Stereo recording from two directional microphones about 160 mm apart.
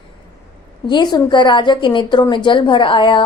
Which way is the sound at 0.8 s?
25° left (ahead or behind).